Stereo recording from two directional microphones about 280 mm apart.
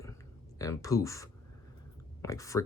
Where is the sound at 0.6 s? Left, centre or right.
Centre.